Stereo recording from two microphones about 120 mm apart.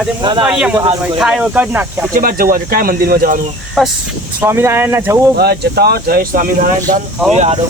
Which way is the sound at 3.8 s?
Centre (ahead or behind).